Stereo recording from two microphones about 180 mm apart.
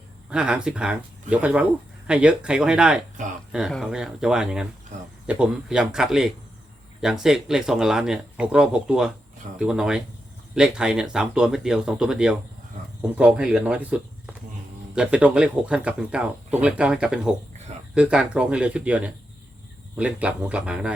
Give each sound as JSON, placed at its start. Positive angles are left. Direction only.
{"t": 0.3, "sound": "speech", "side_deg": -5}
{"t": 3.2, "sound": "speech", "side_deg": -45}
{"t": 3.5, "sound": "speech", "side_deg": 0}